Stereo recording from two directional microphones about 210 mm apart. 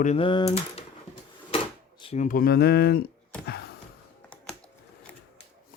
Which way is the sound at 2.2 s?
45° left (ahead or behind).